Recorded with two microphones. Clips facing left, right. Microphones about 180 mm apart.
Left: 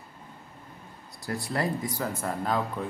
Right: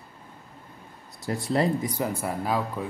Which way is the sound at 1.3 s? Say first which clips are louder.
Right 5 dB; 20° right (ahead or behind).